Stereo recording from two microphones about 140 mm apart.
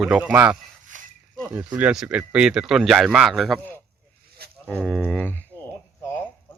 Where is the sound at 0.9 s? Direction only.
65° right (ahead or behind).